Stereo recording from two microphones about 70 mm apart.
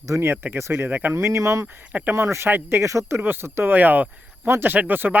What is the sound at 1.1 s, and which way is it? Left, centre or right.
Speech, right.